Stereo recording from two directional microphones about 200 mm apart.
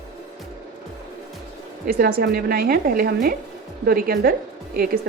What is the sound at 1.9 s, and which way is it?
A woman's voice, 50° right (ahead or behind).